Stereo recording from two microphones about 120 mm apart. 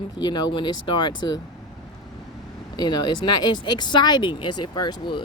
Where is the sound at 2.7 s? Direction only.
35° left (ahead or behind).